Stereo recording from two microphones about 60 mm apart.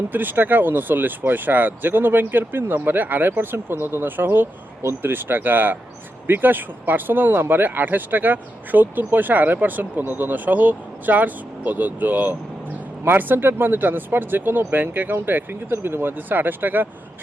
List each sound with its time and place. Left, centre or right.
0.1 s speech: right